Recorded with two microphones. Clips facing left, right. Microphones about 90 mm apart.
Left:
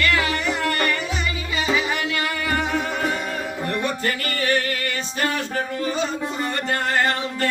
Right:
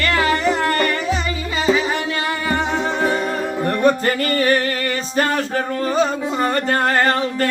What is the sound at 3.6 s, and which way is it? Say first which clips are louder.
Music: right 9 dB; 40° right (ahead or behind).